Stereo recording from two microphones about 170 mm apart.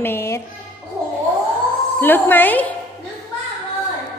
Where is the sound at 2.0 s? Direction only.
10° left (ahead or behind).